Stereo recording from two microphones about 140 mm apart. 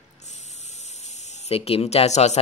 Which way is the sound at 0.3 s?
55° left (ahead or behind).